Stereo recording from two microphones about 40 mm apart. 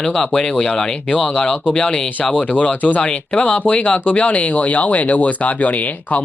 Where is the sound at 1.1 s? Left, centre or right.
Left.